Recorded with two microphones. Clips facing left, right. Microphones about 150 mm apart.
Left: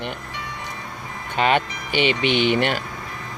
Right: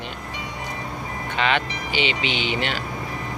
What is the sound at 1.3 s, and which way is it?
Speech, 45° left (ahead or behind).